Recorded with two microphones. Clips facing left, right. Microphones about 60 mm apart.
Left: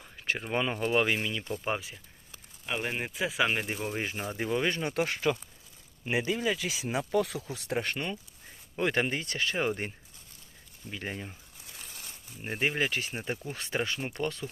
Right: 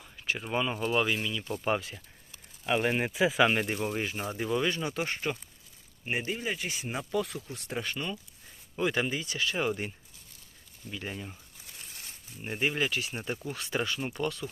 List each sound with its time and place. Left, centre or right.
0.0 s a sound: left
0.7 s speech: left
1.6 s speech: centre
2.6 s speech: centre
4.4 s speech: left
4.9 s speech: left
8.8 s speech: left
9.4 s speech: left
10.9 s speech: left
12.5 s speech: left
13.1 s speech: centre
13.5 s speech: left